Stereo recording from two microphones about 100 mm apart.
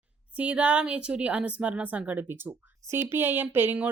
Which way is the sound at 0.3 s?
15° right (ahead or behind).